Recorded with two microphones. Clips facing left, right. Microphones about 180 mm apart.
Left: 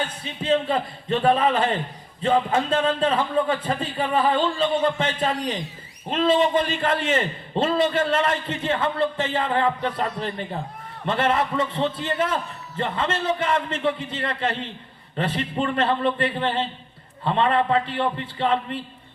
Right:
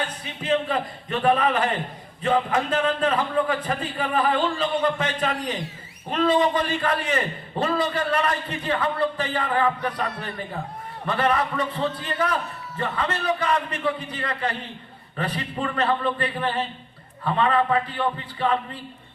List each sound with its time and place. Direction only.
0.4 s a man's voice: 25° left (ahead or behind)